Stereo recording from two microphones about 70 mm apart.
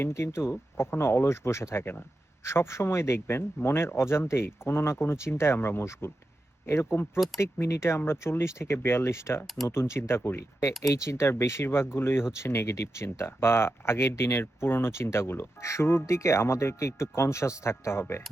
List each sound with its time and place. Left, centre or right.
0.0 s speech: left
10.8 s speech: left